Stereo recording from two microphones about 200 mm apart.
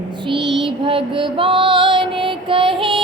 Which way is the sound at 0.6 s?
25° right (ahead or behind).